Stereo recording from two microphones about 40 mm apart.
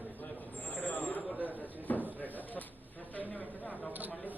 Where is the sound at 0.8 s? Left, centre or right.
Left.